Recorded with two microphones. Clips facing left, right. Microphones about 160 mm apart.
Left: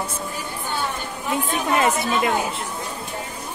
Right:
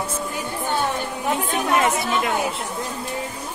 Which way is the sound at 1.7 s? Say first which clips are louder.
Left 1 dB; centre (ahead or behind).